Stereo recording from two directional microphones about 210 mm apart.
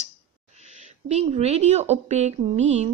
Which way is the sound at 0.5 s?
35° right (ahead or behind).